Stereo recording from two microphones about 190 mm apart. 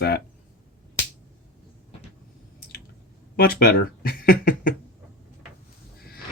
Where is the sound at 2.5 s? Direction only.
55° left (ahead or behind).